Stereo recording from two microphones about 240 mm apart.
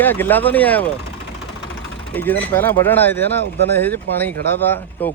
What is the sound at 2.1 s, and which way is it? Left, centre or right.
Speech, centre.